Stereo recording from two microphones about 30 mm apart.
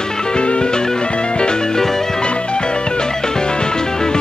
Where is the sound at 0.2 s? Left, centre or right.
Left.